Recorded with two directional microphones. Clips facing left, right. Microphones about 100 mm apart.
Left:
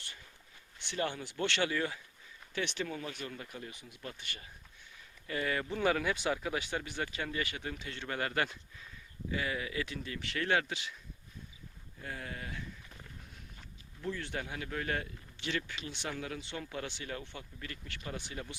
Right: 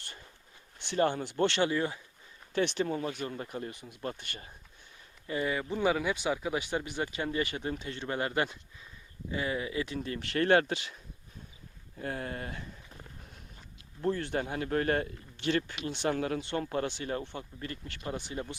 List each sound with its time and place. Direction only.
0.0 s a sound: 40° right (ahead or behind)
0.8 s speech: 35° right (ahead or behind)
1.5 s speech: 30° right (ahead or behind)
5.3 s speech: 20° right (ahead or behind); by 10.9 s 50° right (ahead or behind)
11.9 s speech: 45° right (ahead or behind)
14.0 s a man's voice: 45° right (ahead or behind); by 18.5 s 30° right (ahead or behind)